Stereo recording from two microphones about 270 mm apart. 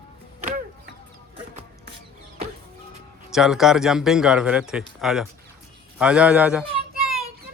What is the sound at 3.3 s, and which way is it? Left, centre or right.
Speech, centre.